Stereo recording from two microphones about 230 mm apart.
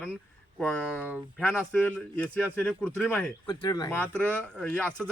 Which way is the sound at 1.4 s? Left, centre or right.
Centre.